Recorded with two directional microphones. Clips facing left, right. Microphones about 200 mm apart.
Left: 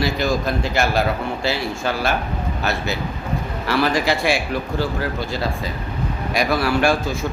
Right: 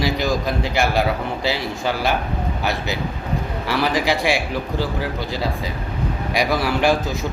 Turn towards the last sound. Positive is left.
turn(degrees=-15)  # may be behind; listen again after turning